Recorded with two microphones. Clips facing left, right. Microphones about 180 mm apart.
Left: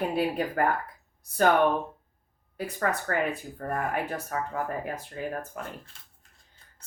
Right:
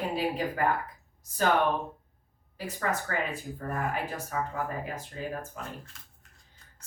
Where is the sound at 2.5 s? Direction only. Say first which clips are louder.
Left 3 dB; 55° left (ahead or behind).